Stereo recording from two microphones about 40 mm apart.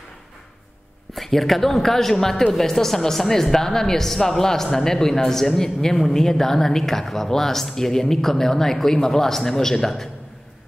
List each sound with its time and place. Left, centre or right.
1.1 s speech: centre